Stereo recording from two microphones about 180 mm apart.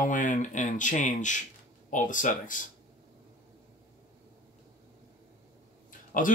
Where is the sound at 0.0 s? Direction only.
45° left (ahead or behind).